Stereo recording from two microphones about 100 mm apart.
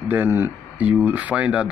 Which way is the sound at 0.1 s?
20° right (ahead or behind).